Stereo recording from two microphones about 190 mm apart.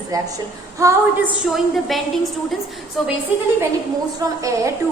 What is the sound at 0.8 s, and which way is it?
Speech, 15° right (ahead or behind).